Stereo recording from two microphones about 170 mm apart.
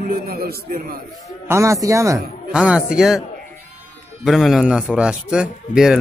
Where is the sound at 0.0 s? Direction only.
60° right (ahead or behind).